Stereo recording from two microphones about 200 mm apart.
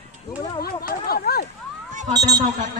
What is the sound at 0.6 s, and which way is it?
Speech, 50° left (ahead or behind).